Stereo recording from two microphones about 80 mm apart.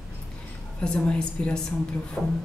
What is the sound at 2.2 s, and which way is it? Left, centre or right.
Music, centre.